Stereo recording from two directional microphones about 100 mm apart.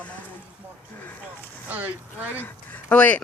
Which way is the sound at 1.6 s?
15° right (ahead or behind).